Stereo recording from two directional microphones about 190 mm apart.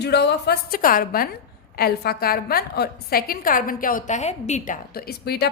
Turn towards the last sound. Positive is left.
turn(degrees=55)  # may be behind; listen again after turning